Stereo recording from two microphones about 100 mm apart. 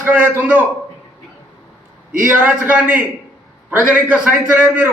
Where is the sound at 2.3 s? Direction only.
15° right (ahead or behind).